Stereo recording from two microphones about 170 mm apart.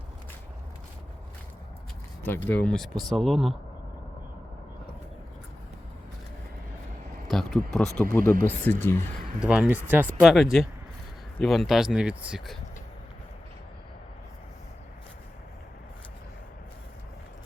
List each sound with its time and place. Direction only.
2.2 s speech: 10° left (ahead or behind)
7.3 s speech: centre (ahead or behind)
8.2 s speech: 55° right (ahead or behind)
8.7 s speech: 10° left (ahead or behind)
9.4 s speech: 5° right (ahead or behind)